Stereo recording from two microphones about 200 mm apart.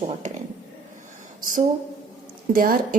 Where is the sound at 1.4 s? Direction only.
40° right (ahead or behind).